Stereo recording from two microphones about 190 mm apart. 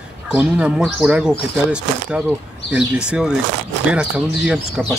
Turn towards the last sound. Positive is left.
turn(degrees=-5)  # may be behind; listen again after turning